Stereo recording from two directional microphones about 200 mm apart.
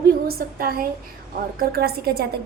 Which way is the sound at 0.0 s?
50° right (ahead or behind).